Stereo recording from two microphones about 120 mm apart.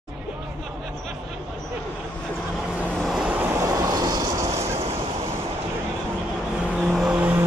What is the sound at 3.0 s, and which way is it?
Vehicle, 5° right (ahead or behind).